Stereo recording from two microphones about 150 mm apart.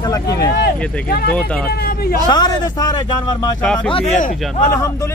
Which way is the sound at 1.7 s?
90° left.